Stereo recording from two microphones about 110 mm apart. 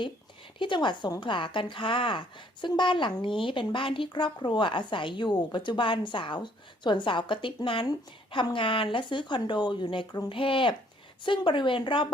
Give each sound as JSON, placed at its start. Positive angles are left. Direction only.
{"t": 0.6, "sound": "a woman's voice", "side_deg": 45}